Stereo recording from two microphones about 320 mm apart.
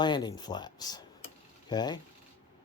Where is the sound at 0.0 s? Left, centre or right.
Centre.